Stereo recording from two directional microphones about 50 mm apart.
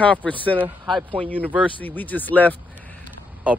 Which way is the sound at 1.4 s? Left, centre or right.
Right.